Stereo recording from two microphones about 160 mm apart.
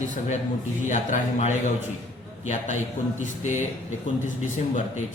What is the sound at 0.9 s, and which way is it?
A man's voice, 50° left (ahead or behind).